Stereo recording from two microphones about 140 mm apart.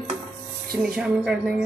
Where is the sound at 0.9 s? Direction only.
5° right (ahead or behind).